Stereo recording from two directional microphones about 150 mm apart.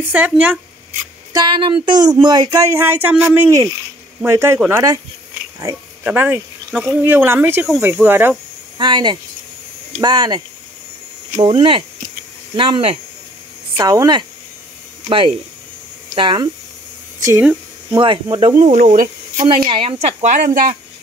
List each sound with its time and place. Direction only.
0.1 s speech: 10° right (ahead or behind)
1.3 s speech: 30° right (ahead or behind)
6.0 s speech: 10° right (ahead or behind)
8.7 s speech: 30° right (ahead or behind)
11.4 s speech: 35° right (ahead or behind)
13.7 s speech: 25° right (ahead or behind)
15.0 s speech: 35° right (ahead or behind)
17.2 s speech: 15° right (ahead or behind)
17.9 s speech: 30° right (ahead or behind)
18.6 s a woman's voice: 50° right (ahead or behind)
19.3 s a woman's voice: 35° right (ahead or behind); by 20.7 s 60° right (ahead or behind)